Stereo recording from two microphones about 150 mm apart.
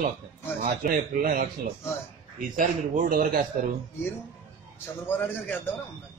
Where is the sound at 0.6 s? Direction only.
70° right (ahead or behind).